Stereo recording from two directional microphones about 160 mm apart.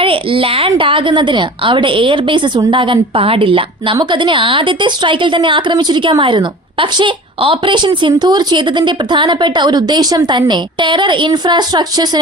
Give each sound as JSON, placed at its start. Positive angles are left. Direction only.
{"t": 0.0, "sound": "a woman's voice", "side_deg": -35}